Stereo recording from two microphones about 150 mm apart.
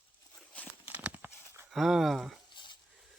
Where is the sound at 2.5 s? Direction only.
30° left (ahead or behind).